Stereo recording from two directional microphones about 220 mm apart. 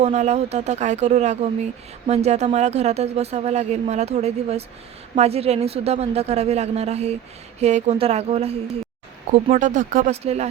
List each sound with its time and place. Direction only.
0.0 s speech: 30° right (ahead or behind)